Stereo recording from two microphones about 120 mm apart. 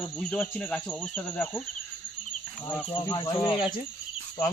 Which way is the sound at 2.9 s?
40° left (ahead or behind).